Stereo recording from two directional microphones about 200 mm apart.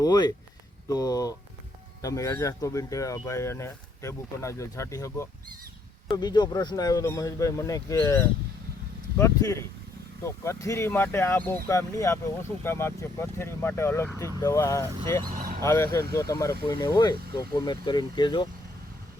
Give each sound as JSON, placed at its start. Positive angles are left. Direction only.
{"t": 0.0, "sound": "speech", "side_deg": 20}